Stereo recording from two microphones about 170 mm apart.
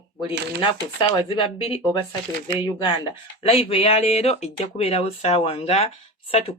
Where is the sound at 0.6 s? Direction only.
30° left (ahead or behind).